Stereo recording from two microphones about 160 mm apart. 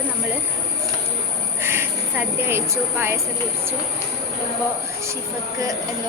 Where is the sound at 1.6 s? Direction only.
15° right (ahead or behind).